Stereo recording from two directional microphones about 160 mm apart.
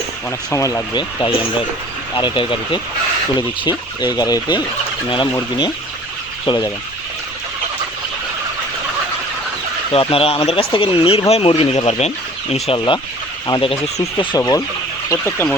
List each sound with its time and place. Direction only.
0.3 s speech: 20° left (ahead or behind)
9.9 s speech: 35° left (ahead or behind)
14.2 s speech: 25° left (ahead or behind)